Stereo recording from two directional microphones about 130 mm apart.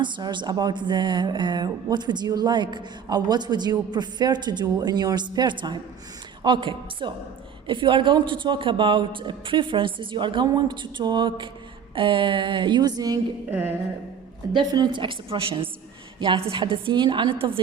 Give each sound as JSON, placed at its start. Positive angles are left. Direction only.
{"t": 0.0, "sound": "speech", "side_deg": -35}
{"t": 13.5, "sound": "music", "side_deg": -15}
{"t": 14.5, "sound": "speech", "side_deg": -35}